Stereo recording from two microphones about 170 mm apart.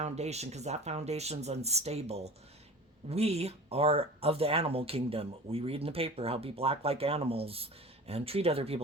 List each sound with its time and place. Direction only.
0.0 s speech: 40° right (ahead or behind)